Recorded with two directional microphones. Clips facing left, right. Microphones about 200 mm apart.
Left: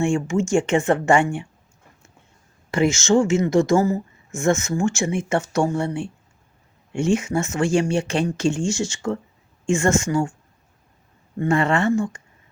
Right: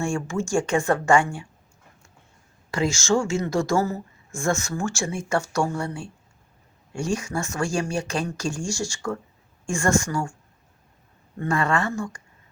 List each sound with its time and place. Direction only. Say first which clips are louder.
0.0 s speech: left 5 dB; 20° left (ahead or behind)
2.6 s speech: left 4 dB; 25° left (ahead or behind)
11.3 s speech: left 4 dB; 25° left (ahead or behind)